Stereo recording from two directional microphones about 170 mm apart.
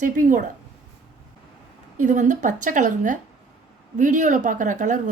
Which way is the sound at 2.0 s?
45° right (ahead or behind).